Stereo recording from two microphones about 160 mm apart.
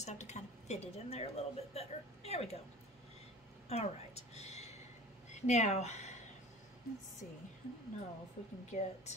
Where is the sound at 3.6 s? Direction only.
40° left (ahead or behind).